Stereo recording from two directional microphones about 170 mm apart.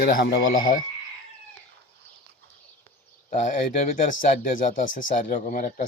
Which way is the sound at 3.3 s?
45° left (ahead or behind).